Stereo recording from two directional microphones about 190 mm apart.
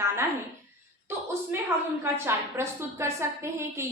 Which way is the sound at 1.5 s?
10° right (ahead or behind).